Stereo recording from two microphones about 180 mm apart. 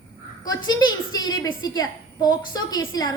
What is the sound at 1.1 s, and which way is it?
A woman's voice, 20° left (ahead or behind).